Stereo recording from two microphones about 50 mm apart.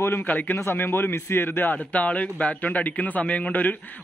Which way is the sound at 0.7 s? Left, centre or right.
Left.